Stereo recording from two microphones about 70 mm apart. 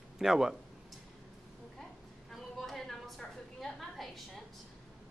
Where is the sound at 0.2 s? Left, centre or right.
Centre.